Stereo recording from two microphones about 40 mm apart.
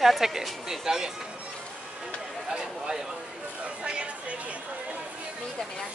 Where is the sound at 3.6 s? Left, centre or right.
Right.